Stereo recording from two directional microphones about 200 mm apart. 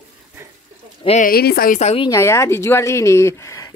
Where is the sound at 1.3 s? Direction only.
50° left (ahead or behind); by 2.0 s 35° left (ahead or behind).